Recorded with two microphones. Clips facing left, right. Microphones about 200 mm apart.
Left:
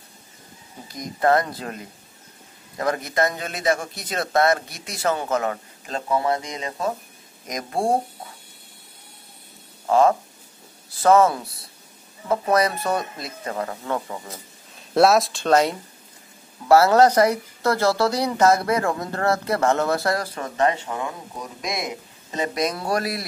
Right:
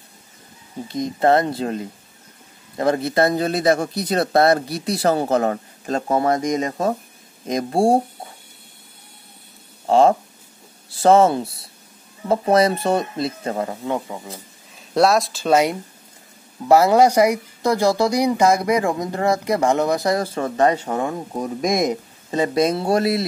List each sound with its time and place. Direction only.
0.8 s speech: 25° right (ahead or behind); by 6.9 s 45° right (ahead or behind)
7.4 s speech: 30° right (ahead or behind)
9.8 s a sound: 30° right (ahead or behind)
10.9 s speech: 30° right (ahead or behind)
13.7 s speech: 15° right (ahead or behind)
15.0 s speech: centre (ahead or behind); by 20.2 s 15° right (ahead or behind)
20.3 s speech: 35° right (ahead or behind)
22.3 s speech: 30° right (ahead or behind)